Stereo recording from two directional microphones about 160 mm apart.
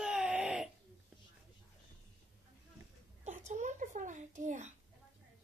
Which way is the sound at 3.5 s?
50° right (ahead or behind).